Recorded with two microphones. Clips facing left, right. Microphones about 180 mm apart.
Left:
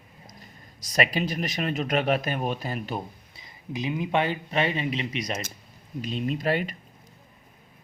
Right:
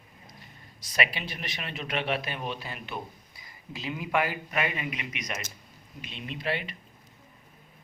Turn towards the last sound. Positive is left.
turn(degrees=45)  # may be behind; listen again after turning